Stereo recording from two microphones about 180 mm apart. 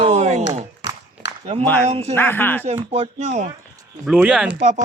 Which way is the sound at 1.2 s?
75° left (ahead or behind).